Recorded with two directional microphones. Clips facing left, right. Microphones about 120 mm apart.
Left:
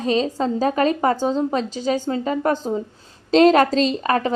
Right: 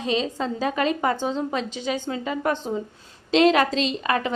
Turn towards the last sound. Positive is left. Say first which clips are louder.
# left 4 dB
turn(degrees=40)  # may be behind; listen again after turning